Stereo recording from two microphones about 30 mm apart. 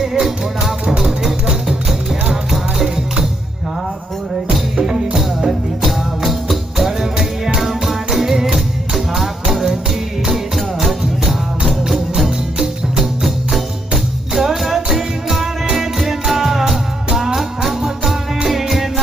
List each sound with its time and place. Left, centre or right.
0.0 s music: centre
4.8 s music: centre
5.8 s music: centre
13.0 s music: centre